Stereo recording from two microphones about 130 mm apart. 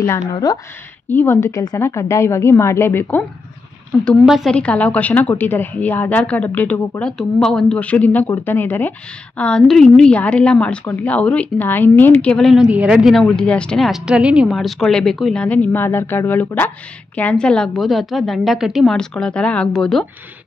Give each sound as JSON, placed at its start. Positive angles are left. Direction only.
{"t": 0.3, "sound": "a woman's voice", "side_deg": 30}
{"t": 1.1, "sound": "a woman's voice", "side_deg": 15}
{"t": 4.3, "sound": "a woman's voice", "side_deg": 0}
{"t": 4.6, "sound": "a woman's voice", "side_deg": 10}
{"t": 15.4, "sound": "a woman's voice", "side_deg": 10}